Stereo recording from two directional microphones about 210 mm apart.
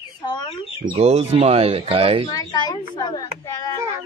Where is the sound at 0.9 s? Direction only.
30° right (ahead or behind).